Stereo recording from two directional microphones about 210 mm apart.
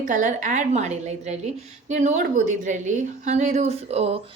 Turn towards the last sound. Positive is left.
turn(degrees=-30)  # may be behind; listen again after turning